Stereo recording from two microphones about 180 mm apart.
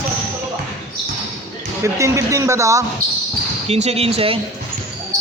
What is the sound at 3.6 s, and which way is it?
Speech, 35° right (ahead or behind).